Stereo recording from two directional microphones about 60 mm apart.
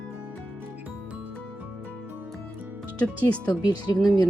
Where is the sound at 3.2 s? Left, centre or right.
Centre.